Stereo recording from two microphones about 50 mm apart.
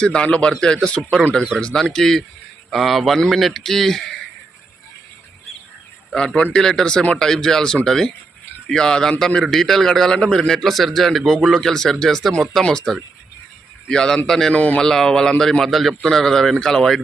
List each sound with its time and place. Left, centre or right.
0.0 s a man's voice: centre
6.1 s a man's voice: centre
14.5 s a man's voice: left
14.8 s a man's voice: centre
16.0 s a man's voice: centre